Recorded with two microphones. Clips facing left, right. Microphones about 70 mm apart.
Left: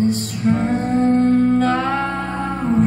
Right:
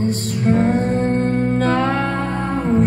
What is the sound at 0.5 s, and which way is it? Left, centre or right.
Music, right.